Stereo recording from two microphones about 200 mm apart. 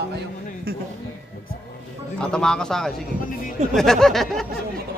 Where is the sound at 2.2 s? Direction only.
5° left (ahead or behind).